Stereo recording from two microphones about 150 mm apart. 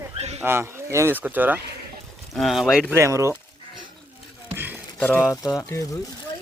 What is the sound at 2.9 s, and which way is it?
Speech, 20° right (ahead or behind).